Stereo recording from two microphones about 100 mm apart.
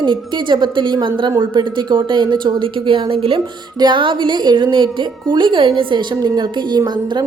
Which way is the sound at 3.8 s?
55° right (ahead or behind).